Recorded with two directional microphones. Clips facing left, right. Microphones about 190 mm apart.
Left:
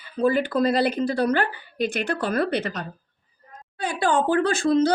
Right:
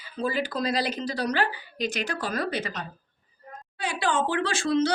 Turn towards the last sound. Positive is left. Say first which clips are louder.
# left 5 dB
turn(degrees=50)  # may be behind; listen again after turning